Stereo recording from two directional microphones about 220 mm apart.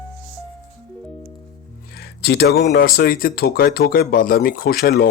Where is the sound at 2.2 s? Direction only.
45° left (ahead or behind).